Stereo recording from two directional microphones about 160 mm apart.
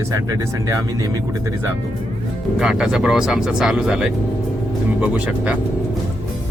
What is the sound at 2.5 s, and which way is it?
Speech, 5° right (ahead or behind).